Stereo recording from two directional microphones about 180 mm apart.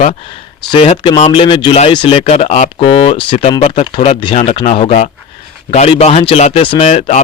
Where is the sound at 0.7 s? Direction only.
30° left (ahead or behind).